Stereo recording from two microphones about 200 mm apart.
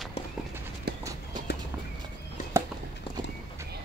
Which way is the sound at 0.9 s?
55° right (ahead or behind).